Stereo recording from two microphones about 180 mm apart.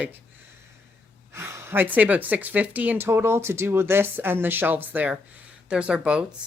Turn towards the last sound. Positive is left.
turn(degrees=-5)  # may be behind; listen again after turning